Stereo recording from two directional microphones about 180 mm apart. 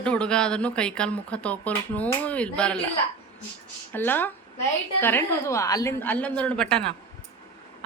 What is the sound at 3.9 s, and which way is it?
A woman's voice, 10° left (ahead or behind).